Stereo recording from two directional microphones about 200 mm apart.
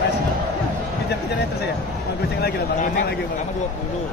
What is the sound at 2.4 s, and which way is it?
Speech, 55° left (ahead or behind).